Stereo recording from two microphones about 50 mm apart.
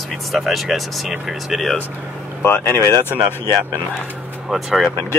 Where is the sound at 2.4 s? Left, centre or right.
Left.